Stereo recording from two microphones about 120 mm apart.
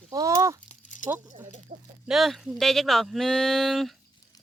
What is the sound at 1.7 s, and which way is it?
Speech, 70° right (ahead or behind).